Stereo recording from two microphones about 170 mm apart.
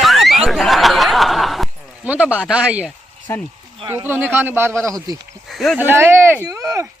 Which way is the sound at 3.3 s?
15° left (ahead or behind).